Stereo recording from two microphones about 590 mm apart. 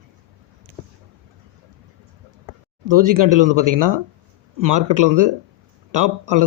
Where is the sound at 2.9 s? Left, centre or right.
Right.